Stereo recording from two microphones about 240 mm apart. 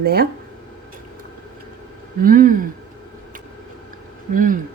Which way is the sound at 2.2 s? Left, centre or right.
Right.